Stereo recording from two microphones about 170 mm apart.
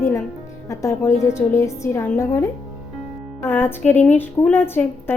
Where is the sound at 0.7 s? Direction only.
15° left (ahead or behind).